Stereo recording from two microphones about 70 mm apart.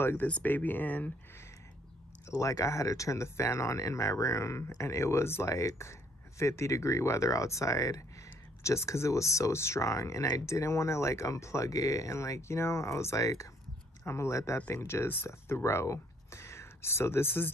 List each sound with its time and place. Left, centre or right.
0.0 s speech: left
2.3 s speech: left